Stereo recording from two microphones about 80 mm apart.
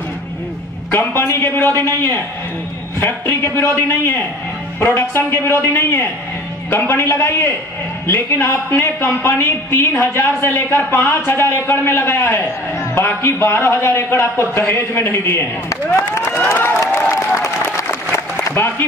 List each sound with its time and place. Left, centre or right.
0.9 s a man's voice: left
16.1 s a sound: left
17.1 s applause: left
18.5 s a man's voice: left